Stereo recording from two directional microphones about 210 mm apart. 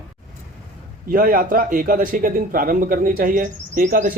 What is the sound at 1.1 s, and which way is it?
Speech, 40° right (ahead or behind).